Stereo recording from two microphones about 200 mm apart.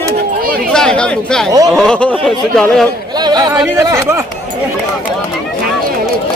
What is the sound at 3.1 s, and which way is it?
Speech, 20° right (ahead or behind).